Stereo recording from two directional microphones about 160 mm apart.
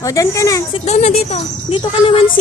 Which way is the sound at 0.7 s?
45° left (ahead or behind).